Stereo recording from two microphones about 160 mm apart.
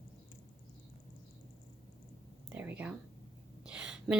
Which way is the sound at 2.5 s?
10° right (ahead or behind).